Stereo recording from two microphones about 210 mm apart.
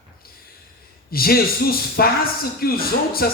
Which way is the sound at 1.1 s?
45° left (ahead or behind).